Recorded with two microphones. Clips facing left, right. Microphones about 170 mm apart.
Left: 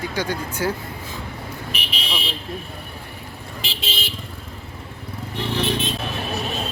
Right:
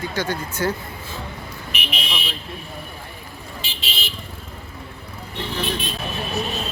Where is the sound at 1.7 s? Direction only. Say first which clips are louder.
Right 3 dB; 30° left (ahead or behind).